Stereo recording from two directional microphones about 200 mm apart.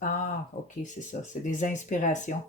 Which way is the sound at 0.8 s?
40° left (ahead or behind).